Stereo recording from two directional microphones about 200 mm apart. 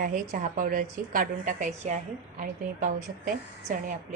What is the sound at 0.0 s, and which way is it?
A woman's voice, 40° right (ahead or behind).